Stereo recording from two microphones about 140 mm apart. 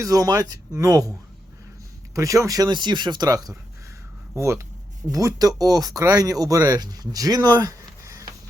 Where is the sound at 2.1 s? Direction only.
20° right (ahead or behind).